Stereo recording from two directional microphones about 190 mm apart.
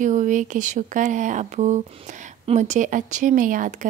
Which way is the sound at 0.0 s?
40° right (ahead or behind).